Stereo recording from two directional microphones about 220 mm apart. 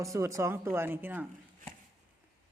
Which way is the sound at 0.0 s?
15° right (ahead or behind).